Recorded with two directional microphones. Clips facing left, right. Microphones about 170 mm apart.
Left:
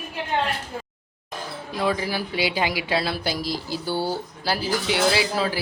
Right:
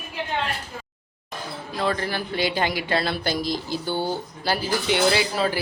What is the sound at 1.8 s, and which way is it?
Speech, 10° left (ahead or behind).